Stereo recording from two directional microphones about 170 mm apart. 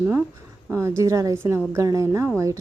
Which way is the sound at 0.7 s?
15° right (ahead or behind).